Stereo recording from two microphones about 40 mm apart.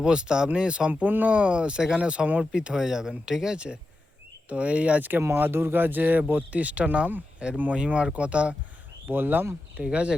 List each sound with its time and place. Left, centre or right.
0.0 s speech: right
0.9 s speech: right
2.4 s speech: right
4.4 s speech: right
5.5 s speech: right
5.7 s speech: right
6.5 s speech: right
9.0 s speech: right
9.7 s speech: right